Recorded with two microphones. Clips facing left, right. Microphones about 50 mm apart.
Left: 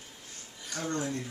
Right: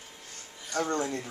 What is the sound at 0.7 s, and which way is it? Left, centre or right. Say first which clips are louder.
Speech: right 4 dB; right.